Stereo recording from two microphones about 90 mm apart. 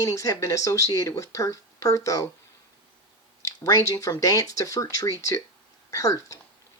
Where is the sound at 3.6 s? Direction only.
35° left (ahead or behind).